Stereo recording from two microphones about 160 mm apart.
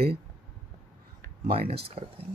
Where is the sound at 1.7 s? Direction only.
35° right (ahead or behind).